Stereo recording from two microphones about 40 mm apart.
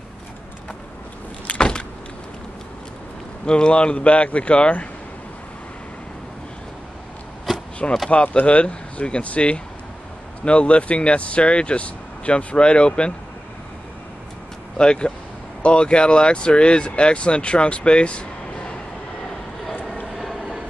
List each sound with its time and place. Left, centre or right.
1.6 s vehicle: left
3.4 s speech: left
7.5 s a sound: centre
8.1 s speech: left
14.8 s speech: left
20.2 s train: centre